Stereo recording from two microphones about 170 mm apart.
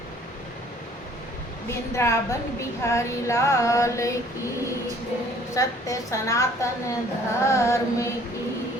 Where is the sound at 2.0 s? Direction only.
15° left (ahead or behind).